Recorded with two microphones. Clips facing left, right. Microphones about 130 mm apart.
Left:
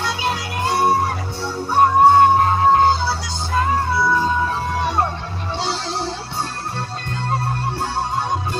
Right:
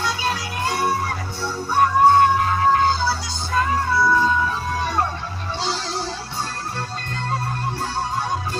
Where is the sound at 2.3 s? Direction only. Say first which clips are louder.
Left 3 dB; 30° left (ahead or behind).